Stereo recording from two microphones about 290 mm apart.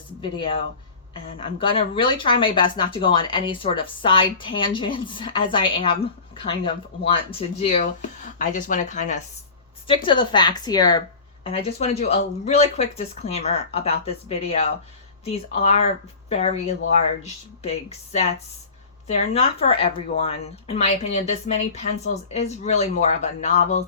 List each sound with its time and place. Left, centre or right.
1.4 s a woman's voice: centre